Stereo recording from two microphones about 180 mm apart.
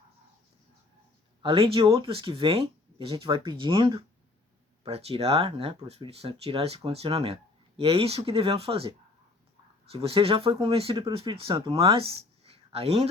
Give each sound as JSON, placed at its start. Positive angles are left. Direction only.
{"t": 1.4, "sound": "speech", "side_deg": -30}